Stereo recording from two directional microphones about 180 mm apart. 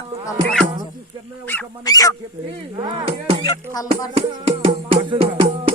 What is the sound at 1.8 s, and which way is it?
Music, 20° left (ahead or behind).